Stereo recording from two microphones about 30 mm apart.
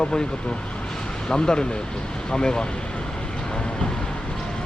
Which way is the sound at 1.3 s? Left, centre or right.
Left.